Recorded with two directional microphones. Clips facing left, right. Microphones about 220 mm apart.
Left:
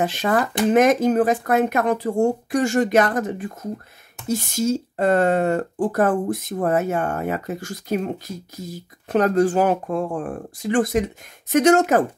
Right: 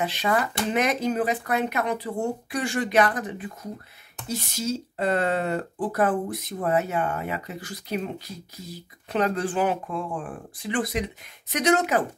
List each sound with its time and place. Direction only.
0.0 s speech: 45° left (ahead or behind)